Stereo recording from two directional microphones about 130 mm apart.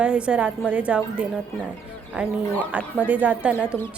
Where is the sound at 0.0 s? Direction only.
10° right (ahead or behind).